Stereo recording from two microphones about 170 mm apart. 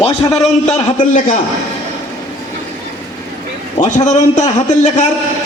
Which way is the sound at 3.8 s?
45° left (ahead or behind).